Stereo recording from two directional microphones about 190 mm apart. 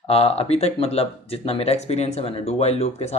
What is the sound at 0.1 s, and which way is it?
Speech, 30° left (ahead or behind).